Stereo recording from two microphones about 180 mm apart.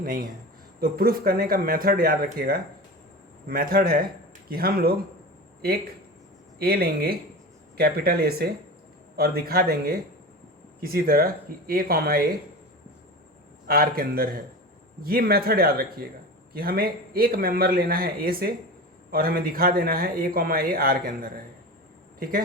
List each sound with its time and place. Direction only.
0.0 s a man's voice: 55° right (ahead or behind)
6.6 s a man's voice: 60° right (ahead or behind)
13.7 s a man's voice: 55° right (ahead or behind)